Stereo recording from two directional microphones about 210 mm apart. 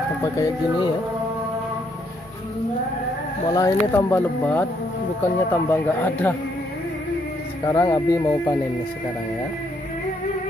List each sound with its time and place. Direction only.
0.2 s speech: 20° left (ahead or behind)
3.4 s speech: 15° left (ahead or behind)
7.6 s speech: 15° left (ahead or behind)